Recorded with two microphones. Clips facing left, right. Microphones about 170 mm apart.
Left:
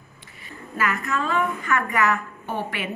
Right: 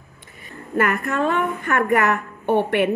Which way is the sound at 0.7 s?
55° right (ahead or behind).